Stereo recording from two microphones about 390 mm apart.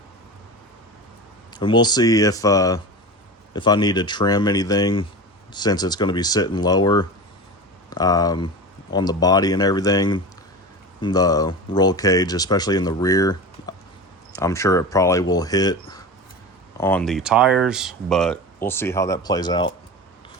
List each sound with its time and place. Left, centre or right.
1.5 s speech: centre